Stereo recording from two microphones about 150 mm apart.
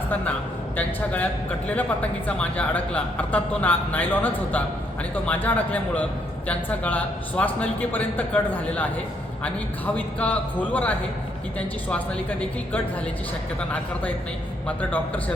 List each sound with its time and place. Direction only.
0.8 s a man's voice: 10° left (ahead or behind)
14.8 s a man's voice: 10° left (ahead or behind)